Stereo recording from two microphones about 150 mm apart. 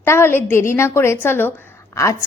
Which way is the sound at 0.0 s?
15° left (ahead or behind).